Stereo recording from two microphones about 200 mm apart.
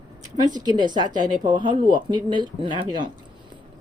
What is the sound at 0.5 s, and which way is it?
A woman's voice, 20° right (ahead or behind).